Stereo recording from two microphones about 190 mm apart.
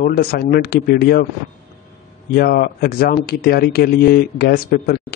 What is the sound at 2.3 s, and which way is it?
Speech, 55° left (ahead or behind).